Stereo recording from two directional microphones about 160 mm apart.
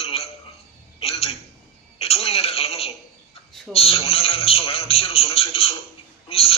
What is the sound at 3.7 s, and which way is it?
A man's voice, 35° left (ahead or behind).